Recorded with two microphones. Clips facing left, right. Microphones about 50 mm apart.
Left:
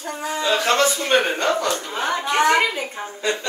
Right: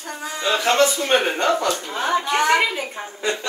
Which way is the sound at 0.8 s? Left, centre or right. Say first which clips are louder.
Right 2 dB; left.